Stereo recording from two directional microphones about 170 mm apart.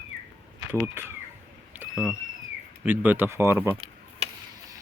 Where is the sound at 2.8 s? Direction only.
10° right (ahead or behind).